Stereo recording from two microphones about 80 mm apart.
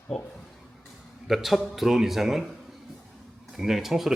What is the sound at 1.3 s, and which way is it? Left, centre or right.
Speech, centre.